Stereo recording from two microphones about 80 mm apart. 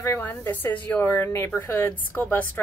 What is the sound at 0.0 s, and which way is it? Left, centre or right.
Speech, left.